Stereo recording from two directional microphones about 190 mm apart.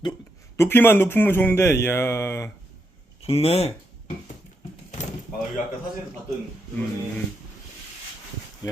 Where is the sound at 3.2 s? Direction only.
30° left (ahead or behind).